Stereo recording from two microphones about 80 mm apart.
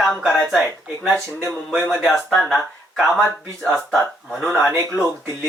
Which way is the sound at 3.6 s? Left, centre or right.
Centre.